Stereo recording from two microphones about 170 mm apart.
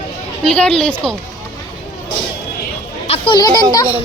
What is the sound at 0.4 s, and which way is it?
Speech, 5° left (ahead or behind).